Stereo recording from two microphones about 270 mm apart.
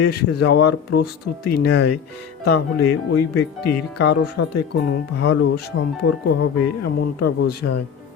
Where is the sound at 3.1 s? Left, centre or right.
Left.